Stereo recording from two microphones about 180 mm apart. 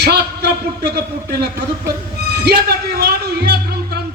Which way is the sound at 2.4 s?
65° right (ahead or behind).